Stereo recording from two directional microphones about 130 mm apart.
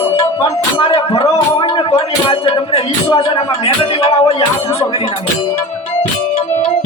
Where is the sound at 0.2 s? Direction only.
50° left (ahead or behind).